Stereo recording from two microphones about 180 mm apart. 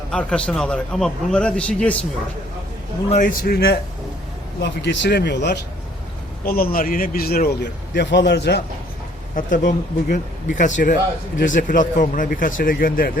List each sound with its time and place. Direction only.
0.1 s a man's voice: 5° left (ahead or behind)
3.1 s a man's voice: 45° left (ahead or behind); by 5.5 s 70° left (ahead or behind)
6.4 s a man's voice: 55° left (ahead or behind)
9.3 s speech: 45° left (ahead or behind)